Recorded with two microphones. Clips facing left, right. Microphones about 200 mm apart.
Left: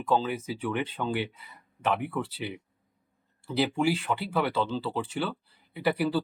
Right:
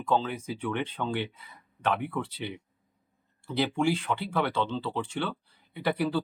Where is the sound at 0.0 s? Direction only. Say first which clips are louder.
Left 1 dB; 5° left (ahead or behind).